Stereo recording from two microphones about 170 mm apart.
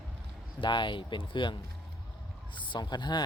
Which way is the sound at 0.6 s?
30° left (ahead or behind).